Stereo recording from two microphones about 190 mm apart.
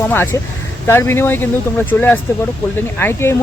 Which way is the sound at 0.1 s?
10° left (ahead or behind).